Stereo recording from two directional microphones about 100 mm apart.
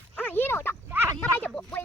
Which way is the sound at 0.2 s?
20° left (ahead or behind).